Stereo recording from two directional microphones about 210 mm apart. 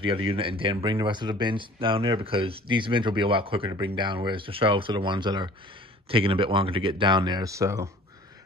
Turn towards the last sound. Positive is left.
turn(degrees=-15)  # may be behind; listen again after turning